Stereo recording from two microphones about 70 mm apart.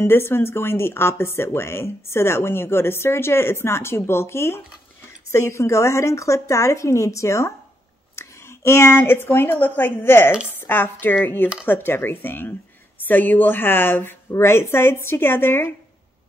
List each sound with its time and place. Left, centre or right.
0.0 s a woman's voice: left